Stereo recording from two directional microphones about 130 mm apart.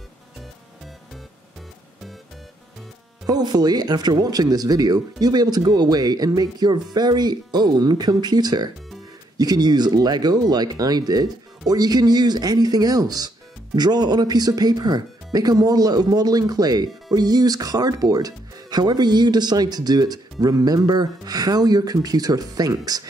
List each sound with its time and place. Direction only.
3.3 s speech: 30° right (ahead or behind)